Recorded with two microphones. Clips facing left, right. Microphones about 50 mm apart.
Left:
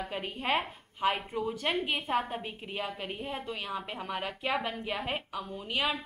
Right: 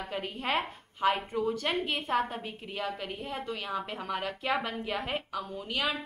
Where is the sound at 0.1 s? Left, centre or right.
Centre.